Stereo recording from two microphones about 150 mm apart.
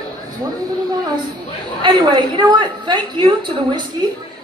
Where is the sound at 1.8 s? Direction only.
30° right (ahead or behind).